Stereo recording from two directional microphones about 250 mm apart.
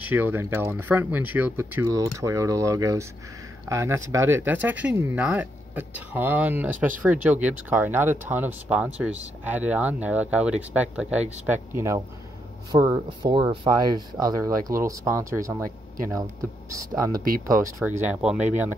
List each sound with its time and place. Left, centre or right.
0.0 s speech: centre